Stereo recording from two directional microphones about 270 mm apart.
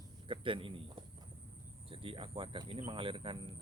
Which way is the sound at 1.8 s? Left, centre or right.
Centre.